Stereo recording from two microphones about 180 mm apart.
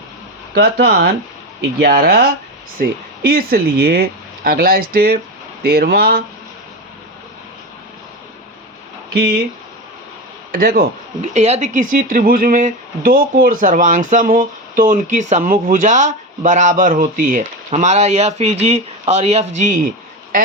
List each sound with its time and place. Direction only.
0.5 s speech: 65° right (ahead or behind)
9.1 s speech: 65° right (ahead or behind)
10.5 s speech: 55° right (ahead or behind)
11.3 s speech: 35° right (ahead or behind)